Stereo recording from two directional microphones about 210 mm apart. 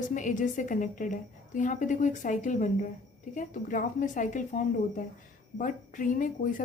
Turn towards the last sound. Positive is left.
turn(degrees=40)  # may be behind; listen again after turning